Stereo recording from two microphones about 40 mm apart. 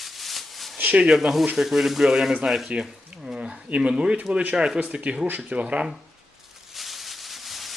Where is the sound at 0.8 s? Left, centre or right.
Right.